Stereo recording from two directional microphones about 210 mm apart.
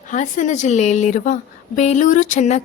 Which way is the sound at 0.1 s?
35° left (ahead or behind).